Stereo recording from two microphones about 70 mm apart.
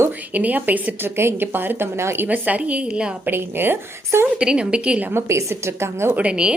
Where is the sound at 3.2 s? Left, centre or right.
Right.